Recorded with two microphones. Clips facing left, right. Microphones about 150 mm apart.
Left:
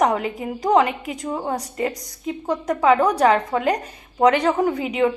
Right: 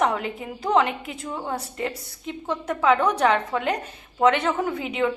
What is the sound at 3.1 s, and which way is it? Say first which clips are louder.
A woman's voice: left 4 dB; 35° left (ahead or behind).